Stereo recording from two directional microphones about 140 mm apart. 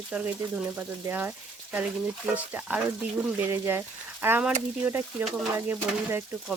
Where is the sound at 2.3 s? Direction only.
10° right (ahead or behind).